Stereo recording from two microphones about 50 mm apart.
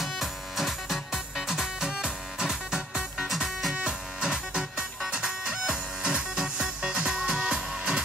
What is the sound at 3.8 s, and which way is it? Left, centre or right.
Music, centre.